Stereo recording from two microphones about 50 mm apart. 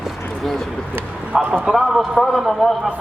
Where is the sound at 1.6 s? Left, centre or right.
Centre.